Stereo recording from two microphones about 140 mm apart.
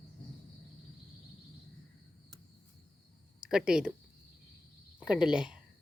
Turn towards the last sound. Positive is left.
turn(degrees=-5)  # may be behind; listen again after turning